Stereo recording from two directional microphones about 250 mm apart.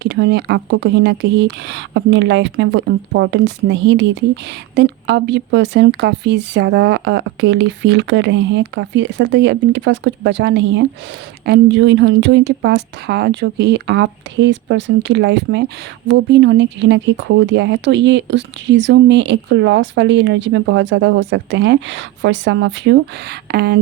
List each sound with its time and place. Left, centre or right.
0.0 s speech: right